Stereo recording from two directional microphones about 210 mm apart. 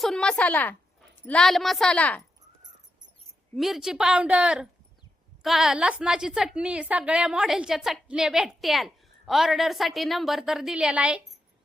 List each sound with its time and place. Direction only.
0.0 s a woman's voice: 5° left (ahead or behind)
3.5 s a woman's voice: centre (ahead or behind)